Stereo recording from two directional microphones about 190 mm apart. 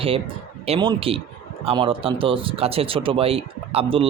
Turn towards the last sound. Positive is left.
turn(degrees=-30)  # may be behind; listen again after turning